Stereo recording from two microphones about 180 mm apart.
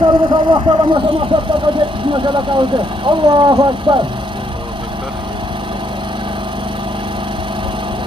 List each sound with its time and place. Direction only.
0.0 s speech: 25° right (ahead or behind)